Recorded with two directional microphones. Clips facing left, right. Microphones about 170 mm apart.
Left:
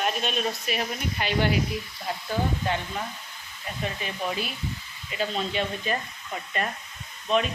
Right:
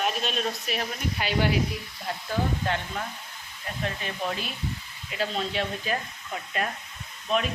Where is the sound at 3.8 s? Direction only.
5° left (ahead or behind).